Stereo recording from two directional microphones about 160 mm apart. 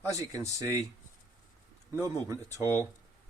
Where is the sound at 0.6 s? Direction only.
20° right (ahead or behind).